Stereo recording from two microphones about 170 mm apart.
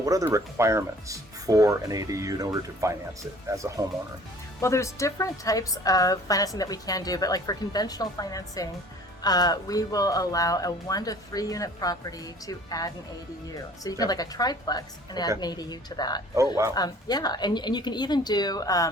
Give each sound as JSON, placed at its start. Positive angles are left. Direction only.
{"t": 0.0, "sound": "speech", "side_deg": -20}
{"t": 4.6, "sound": "a woman's voice", "side_deg": 15}
{"t": 14.0, "sound": "a woman's voice", "side_deg": 20}